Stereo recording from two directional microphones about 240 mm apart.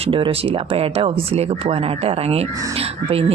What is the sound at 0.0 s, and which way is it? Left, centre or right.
Speech, right.